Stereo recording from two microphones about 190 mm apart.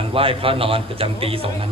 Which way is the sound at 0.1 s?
30° right (ahead or behind).